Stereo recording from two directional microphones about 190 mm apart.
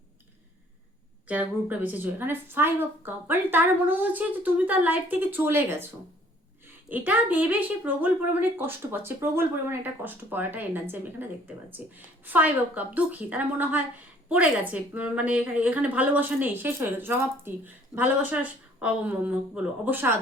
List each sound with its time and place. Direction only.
1.3 s speech: 10° right (ahead or behind)